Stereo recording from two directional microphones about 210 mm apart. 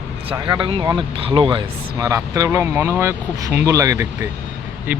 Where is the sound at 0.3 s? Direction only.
20° right (ahead or behind).